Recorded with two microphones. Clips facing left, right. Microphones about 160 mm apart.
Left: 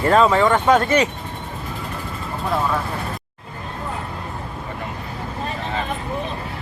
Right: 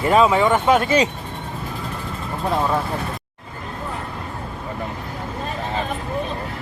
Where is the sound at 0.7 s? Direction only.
20° right (ahead or behind).